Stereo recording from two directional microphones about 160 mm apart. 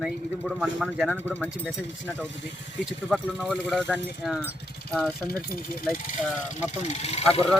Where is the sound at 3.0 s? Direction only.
5° right (ahead or behind).